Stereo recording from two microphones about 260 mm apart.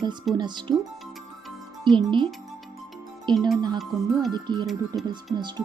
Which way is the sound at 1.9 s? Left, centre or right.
Centre.